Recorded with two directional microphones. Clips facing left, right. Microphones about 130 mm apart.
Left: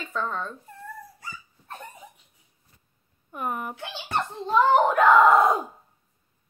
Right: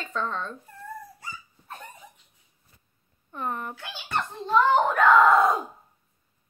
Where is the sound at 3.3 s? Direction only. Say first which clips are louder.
Left 1 dB; 10° left (ahead or behind).